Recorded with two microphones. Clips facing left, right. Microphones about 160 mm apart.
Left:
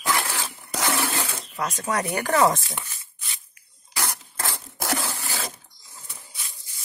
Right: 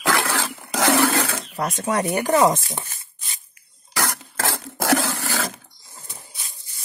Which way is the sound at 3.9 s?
90° right.